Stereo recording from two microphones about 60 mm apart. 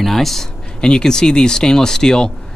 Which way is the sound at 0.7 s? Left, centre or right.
Centre.